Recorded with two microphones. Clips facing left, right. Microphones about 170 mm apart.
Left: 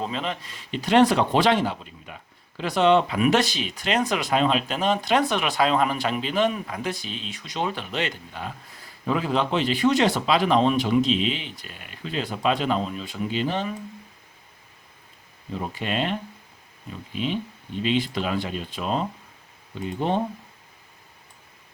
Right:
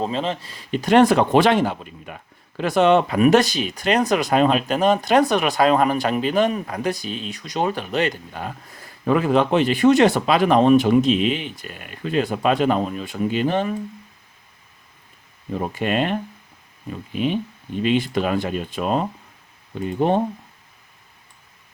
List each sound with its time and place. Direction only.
0.0 s speech: 35° right (ahead or behind)
0.7 s speech: 50° right (ahead or behind)
15.5 s speech: 55° right (ahead or behind)
17.2 s speech: 50° right (ahead or behind)